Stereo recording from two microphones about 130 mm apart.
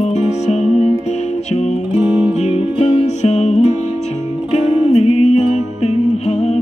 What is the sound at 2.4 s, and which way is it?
Music, 60° left (ahead or behind).